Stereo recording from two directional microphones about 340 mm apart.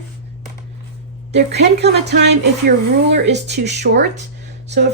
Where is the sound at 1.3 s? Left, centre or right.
Right.